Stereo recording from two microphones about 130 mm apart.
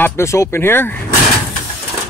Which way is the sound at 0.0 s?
20° left (ahead or behind).